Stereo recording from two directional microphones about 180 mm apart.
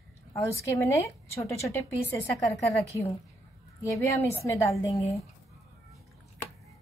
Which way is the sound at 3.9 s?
15° left (ahead or behind).